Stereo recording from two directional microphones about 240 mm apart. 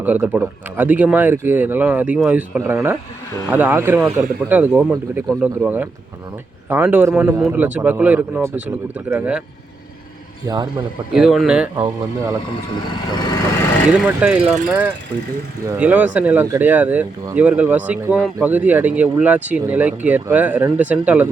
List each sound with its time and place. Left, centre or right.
0.0 s speech: centre
10.4 s speech: centre
11.1 s speech: centre
14.1 s speech: centre